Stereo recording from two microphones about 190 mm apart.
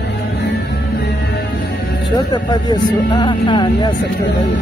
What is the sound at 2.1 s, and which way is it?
Speech, 25° left (ahead or behind).